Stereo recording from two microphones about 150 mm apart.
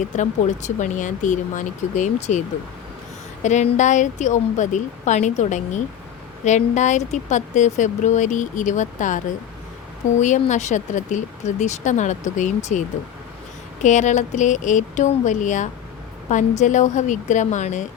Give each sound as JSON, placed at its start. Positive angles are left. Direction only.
{"t": 0.2, "sound": "speech", "side_deg": 55}
{"t": 3.4, "sound": "speech", "side_deg": 55}
{"t": 13.8, "sound": "speech", "side_deg": 55}